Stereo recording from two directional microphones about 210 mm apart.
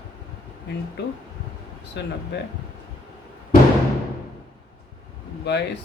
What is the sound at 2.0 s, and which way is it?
Speech, 55° left (ahead or behind).